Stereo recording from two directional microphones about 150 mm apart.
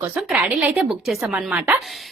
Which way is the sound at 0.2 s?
5° right (ahead or behind).